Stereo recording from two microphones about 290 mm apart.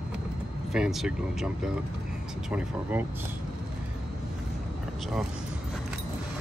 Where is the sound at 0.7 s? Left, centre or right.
Centre.